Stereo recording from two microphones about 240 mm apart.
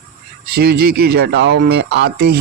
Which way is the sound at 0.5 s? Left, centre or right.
Right.